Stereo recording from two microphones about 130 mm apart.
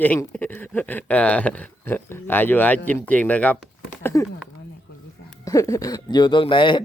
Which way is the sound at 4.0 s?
20° left (ahead or behind).